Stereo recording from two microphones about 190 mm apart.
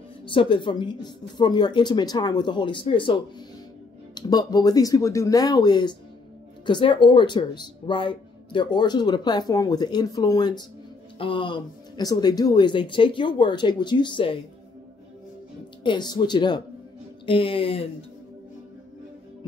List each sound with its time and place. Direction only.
0.2 s speech: 25° left (ahead or behind)
15.8 s speech: 25° left (ahead or behind)